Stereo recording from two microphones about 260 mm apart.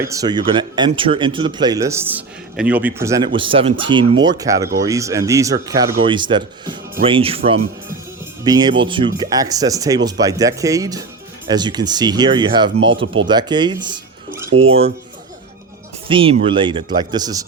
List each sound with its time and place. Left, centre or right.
0.0 s speech: centre
16.0 s speech: centre